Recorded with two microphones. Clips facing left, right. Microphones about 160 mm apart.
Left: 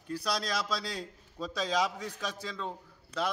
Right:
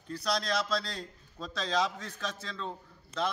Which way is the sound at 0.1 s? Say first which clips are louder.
Right 1 dB; 10° left (ahead or behind).